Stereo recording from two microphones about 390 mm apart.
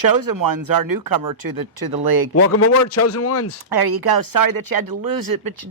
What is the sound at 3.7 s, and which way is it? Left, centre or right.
Speech, right.